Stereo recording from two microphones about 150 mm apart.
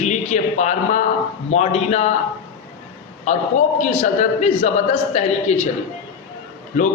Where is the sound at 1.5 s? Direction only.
45° left (ahead or behind).